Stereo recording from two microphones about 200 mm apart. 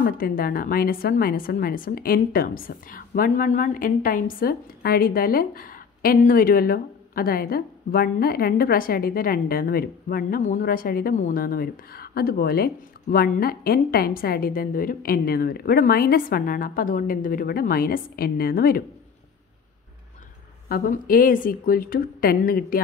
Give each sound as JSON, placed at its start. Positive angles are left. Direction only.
{"t": 0.0, "sound": "a woman's voice", "side_deg": 45}
{"t": 20.6, "sound": "a woman's voice", "side_deg": 45}